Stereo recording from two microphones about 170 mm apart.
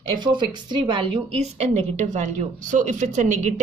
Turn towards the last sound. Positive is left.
turn(degrees=-45)  # may be behind; listen again after turning